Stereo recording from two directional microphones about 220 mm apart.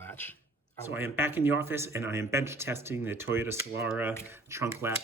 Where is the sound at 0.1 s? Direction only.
10° left (ahead or behind).